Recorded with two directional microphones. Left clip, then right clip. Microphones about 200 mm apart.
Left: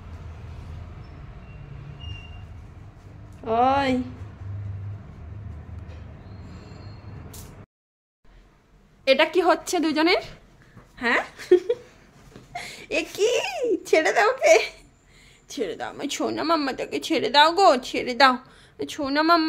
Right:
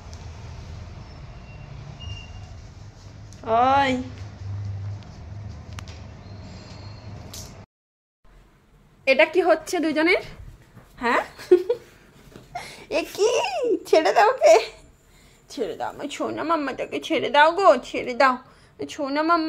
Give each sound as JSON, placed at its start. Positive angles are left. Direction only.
{"t": 3.4, "sound": "speech", "side_deg": 25}
{"t": 9.0, "sound": "a woman's voice", "side_deg": 10}
{"t": 11.0, "sound": "a sound", "side_deg": 0}
{"t": 12.5, "sound": "a woman's voice", "side_deg": 0}
{"t": 15.9, "sound": "a woman's voice", "side_deg": 20}